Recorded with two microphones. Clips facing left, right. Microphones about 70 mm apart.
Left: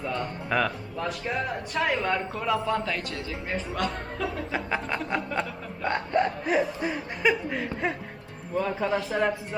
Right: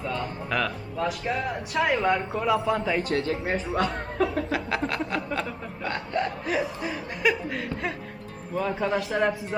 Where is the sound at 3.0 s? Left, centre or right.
Right.